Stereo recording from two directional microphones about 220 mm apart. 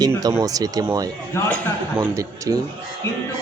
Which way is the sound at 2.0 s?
15° right (ahead or behind).